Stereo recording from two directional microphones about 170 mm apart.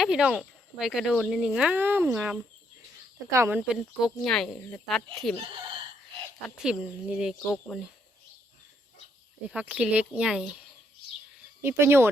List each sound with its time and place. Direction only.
0.0 s speech: 5° right (ahead or behind)
3.3 s speech: 15° right (ahead or behind)
3.7 s speech: centre (ahead or behind)
6.6 s speech: 5° right (ahead or behind)
9.5 s speech: 5° right (ahead or behind)
11.6 s speech: 15° right (ahead or behind)